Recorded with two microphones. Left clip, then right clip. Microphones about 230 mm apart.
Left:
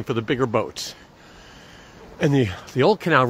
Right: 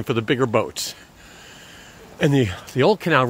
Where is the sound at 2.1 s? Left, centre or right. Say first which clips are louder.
Right 1 dB; centre.